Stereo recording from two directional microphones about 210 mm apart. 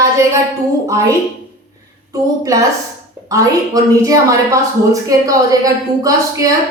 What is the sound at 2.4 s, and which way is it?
Speech, 15° right (ahead or behind).